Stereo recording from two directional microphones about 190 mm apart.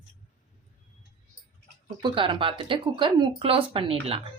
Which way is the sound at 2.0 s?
25° right (ahead or behind).